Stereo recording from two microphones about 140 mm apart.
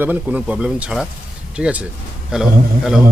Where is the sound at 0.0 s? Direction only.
10° right (ahead or behind).